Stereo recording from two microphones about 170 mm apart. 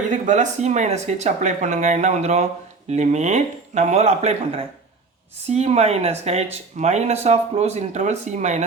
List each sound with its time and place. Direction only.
0.1 s speech: 45° right (ahead or behind)